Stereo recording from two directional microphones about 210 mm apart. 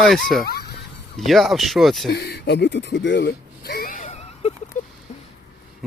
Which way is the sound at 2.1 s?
50° left (ahead or behind).